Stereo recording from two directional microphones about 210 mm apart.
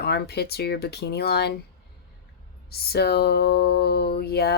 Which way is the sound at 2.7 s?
50° left (ahead or behind).